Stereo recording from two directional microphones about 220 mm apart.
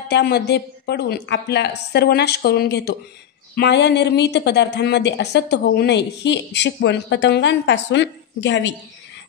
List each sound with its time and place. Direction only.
0.1 s a woman's voice: 50° left (ahead or behind)